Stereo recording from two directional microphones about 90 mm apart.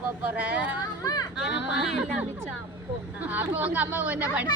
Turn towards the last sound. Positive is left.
turn(degrees=-15)  # may be behind; listen again after turning